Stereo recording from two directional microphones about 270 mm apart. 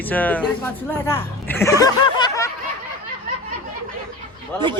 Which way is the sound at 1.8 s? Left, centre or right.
Centre.